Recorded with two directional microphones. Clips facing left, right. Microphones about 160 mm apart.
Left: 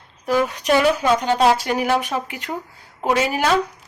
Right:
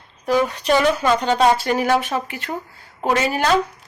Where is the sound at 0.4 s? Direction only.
10° left (ahead or behind).